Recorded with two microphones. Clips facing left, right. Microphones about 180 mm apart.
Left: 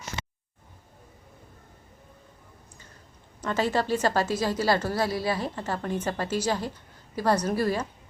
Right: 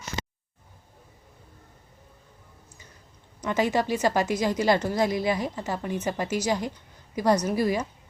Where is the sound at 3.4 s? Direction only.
15° right (ahead or behind).